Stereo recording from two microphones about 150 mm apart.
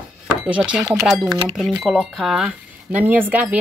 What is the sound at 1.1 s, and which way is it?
Speech, centre (ahead or behind).